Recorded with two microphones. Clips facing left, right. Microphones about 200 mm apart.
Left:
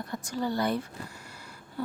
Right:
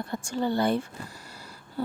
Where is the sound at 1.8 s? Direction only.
30° right (ahead or behind).